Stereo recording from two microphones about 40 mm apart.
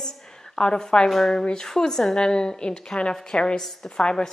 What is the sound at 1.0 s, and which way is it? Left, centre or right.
A woman's voice, centre.